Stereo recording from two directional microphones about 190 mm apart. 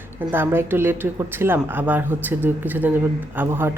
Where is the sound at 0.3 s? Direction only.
10° right (ahead or behind).